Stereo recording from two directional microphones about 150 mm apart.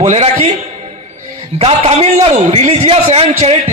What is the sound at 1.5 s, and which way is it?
A man's voice, 40° right (ahead or behind).